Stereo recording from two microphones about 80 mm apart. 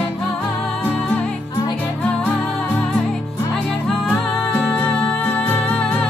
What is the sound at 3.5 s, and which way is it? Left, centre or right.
Music, centre.